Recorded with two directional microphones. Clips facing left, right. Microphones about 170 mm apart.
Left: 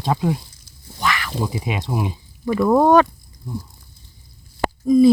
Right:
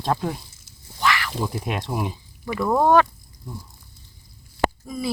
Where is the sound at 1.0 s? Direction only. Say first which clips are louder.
Even; 20° left (ahead or behind).